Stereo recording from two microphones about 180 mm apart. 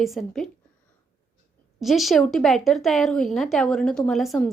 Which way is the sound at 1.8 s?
Centre (ahead or behind).